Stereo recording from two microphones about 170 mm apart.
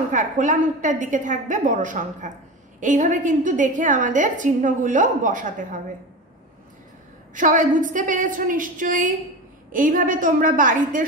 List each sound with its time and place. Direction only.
0.1 s a woman's voice: 50° right (ahead or behind)
7.3 s a woman's voice: 50° right (ahead or behind)